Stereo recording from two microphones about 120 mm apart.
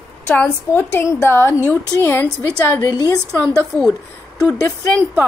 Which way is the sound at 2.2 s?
30° left (ahead or behind).